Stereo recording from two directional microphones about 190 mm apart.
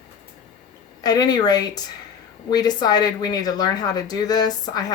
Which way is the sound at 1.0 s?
20° left (ahead or behind).